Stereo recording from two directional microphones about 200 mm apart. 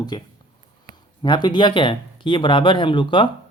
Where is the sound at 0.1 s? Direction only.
25° left (ahead or behind).